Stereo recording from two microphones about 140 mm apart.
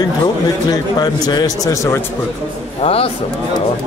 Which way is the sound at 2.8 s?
45° left (ahead or behind).